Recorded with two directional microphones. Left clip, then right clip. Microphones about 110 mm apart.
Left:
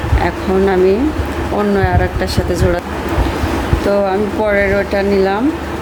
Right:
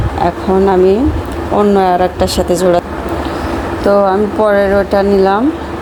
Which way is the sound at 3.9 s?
30° right (ahead or behind).